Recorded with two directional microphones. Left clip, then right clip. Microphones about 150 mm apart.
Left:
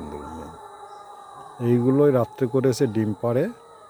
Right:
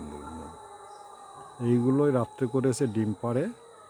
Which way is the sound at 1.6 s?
15° left (ahead or behind).